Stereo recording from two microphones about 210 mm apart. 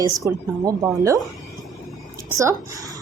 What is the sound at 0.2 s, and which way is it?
Speech, 15° right (ahead or behind).